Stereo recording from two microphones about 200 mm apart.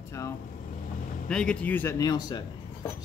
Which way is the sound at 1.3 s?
5° left (ahead or behind).